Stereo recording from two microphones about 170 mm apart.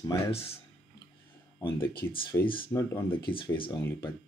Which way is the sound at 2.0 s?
15° left (ahead or behind).